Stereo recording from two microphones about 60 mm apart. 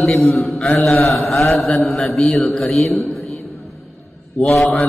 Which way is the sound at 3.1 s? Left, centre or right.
Centre.